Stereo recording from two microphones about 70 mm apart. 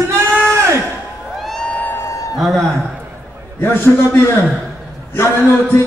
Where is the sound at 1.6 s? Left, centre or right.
Centre.